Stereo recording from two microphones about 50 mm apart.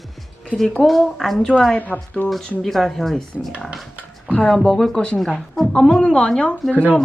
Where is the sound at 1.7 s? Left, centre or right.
Left.